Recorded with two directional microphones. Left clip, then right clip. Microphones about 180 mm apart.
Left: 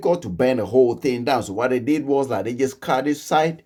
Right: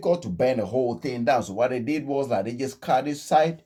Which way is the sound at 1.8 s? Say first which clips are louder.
Left 6 dB; 30° left (ahead or behind).